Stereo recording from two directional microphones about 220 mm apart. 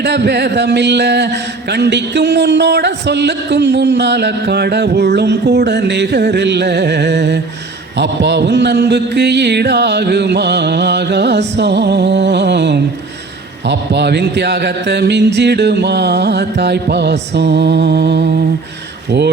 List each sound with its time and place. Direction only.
0.0 s speech: 50° right (ahead or behind)